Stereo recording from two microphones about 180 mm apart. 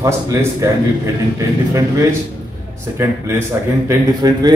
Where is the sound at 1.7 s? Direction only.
20° right (ahead or behind).